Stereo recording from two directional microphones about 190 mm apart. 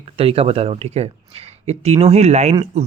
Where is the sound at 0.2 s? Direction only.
30° right (ahead or behind).